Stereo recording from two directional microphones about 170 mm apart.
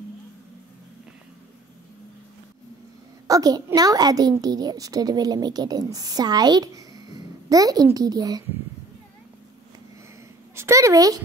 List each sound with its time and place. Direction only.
3.3 s a child's voice: 20° right (ahead or behind)
10.5 s a woman's voice: 15° right (ahead or behind)